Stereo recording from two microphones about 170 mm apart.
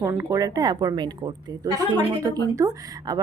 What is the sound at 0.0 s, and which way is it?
Speech, 20° right (ahead or behind).